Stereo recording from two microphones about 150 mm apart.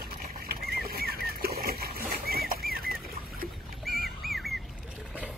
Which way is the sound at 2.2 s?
90° right.